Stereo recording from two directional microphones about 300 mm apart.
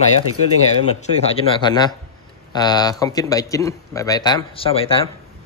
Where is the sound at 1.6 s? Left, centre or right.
Centre.